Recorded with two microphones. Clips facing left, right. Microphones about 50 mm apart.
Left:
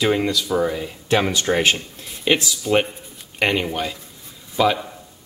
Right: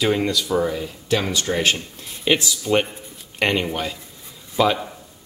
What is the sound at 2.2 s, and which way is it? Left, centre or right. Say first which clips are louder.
A man's voice: even; centre.